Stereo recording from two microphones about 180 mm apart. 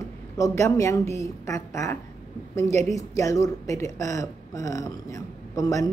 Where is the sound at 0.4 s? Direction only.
15° left (ahead or behind).